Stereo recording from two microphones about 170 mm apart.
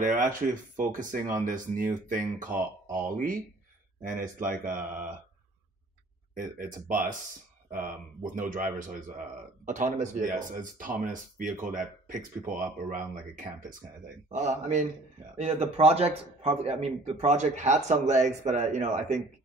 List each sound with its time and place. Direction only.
0.0 s speech: 50° right (ahead or behind)
6.3 s speech: 50° right (ahead or behind)
8.3 s a man's voice: 50° right (ahead or behind)